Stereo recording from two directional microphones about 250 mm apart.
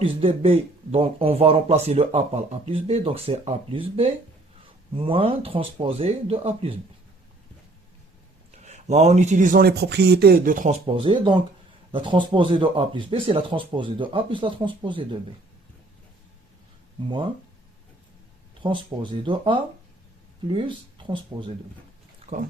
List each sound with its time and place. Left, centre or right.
0.0 s speech: right
8.6 s speech: right
10.8 s speech: right
18.6 s speech: centre